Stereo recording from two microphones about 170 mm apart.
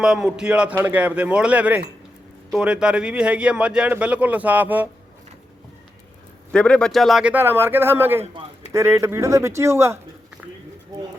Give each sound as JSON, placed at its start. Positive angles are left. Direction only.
{"t": 0.0, "sound": "speech", "side_deg": -5}
{"t": 6.5, "sound": "speech", "side_deg": 5}